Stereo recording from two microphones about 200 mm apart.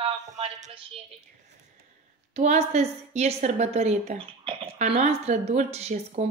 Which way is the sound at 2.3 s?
35° right (ahead or behind).